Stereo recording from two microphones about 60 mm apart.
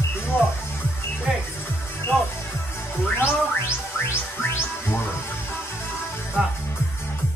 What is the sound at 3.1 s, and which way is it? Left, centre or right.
Music, left.